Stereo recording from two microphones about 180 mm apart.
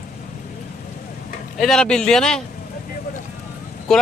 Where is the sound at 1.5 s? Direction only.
Centre (ahead or behind).